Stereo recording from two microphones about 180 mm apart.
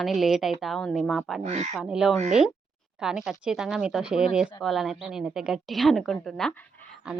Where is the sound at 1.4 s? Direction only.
40° right (ahead or behind).